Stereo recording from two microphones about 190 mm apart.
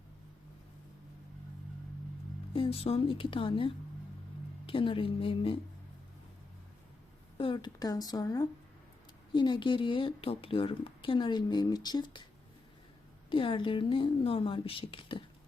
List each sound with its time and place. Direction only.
2.5 s speech: 30° left (ahead or behind)
7.3 s speech: 25° left (ahead or behind)
13.3 s speech: 25° left (ahead or behind)